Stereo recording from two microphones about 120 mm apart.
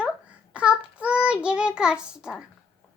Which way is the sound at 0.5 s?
10° right (ahead or behind).